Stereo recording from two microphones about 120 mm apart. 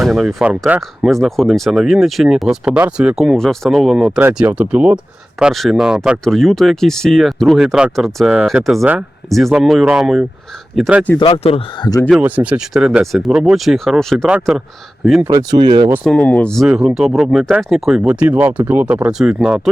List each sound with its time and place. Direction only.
0.0 s speech: centre (ahead or behind)
11.2 s speech: 50° left (ahead or behind)
11.8 s speech: 30° left (ahead or behind)
12.1 s speech: 10° right (ahead or behind)
15.3 s speech: 35° right (ahead or behind)
16.0 s speech: 10° left (ahead or behind)
16.6 s speech: 5° right (ahead or behind)